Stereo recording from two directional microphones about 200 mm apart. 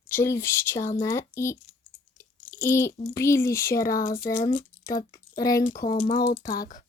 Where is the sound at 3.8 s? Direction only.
45° left (ahead or behind).